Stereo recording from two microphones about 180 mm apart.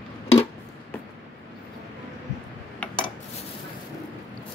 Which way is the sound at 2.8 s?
10° left (ahead or behind).